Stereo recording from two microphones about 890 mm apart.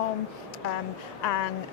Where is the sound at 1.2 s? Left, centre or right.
Left.